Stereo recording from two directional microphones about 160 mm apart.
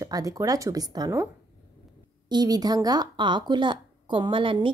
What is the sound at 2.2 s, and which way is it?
Speech, 25° right (ahead or behind).